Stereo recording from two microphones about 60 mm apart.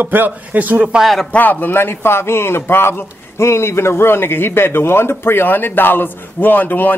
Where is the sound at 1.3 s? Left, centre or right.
Left.